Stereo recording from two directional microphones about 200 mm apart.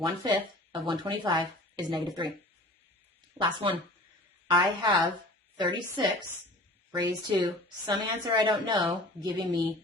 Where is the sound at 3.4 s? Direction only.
15° right (ahead or behind).